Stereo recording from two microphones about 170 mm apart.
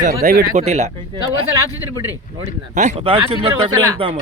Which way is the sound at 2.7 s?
40° right (ahead or behind).